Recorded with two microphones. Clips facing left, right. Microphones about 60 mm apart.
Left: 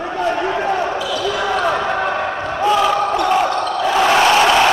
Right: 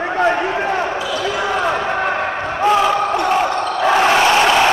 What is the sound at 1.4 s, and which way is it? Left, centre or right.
Basketball bounce, centre.